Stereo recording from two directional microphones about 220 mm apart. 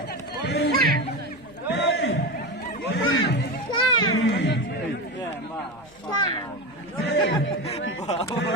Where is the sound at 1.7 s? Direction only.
50° left (ahead or behind).